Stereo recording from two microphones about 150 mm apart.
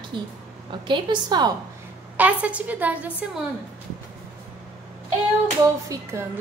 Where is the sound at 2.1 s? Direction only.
10° right (ahead or behind).